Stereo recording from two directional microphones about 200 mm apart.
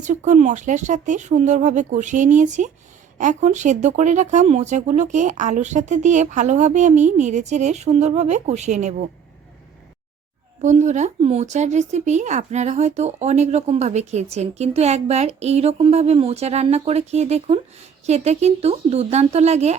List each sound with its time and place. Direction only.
0.0 s speech: 40° right (ahead or behind)
10.6 s speech: 35° right (ahead or behind)